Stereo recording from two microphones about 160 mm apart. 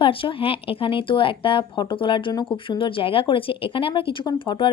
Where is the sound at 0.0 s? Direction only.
35° left (ahead or behind).